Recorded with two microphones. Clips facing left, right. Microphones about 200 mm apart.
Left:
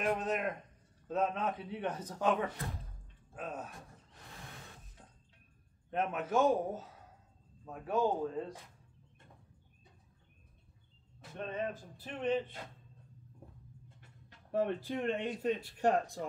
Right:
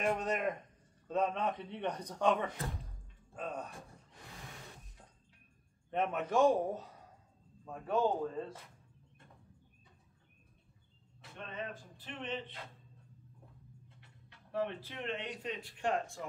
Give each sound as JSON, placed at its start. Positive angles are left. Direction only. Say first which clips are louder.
{"t": 0.0, "sound": "a man's voice", "louder": "even", "side_deg": 0}
{"t": 5.9, "sound": "a man's voice", "louder": "even", "side_deg": 0}
{"t": 12.0, "sound": "speech", "louder": "left 8 dB", "side_deg": 40}
{"t": 14.5, "sound": "speech", "louder": "left 5 dB", "side_deg": 45}